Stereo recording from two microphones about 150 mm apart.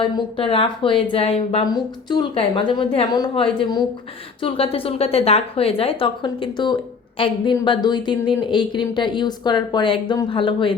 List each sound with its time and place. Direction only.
0.0 s speech: 35° left (ahead or behind)
1.6 s speech: 30° left (ahead or behind)